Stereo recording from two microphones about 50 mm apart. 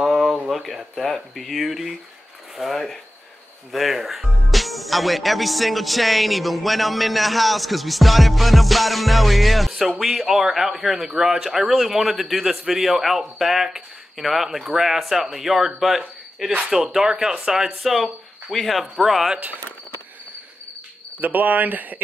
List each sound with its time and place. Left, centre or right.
0.0 s speech: centre
21.2 s speech: right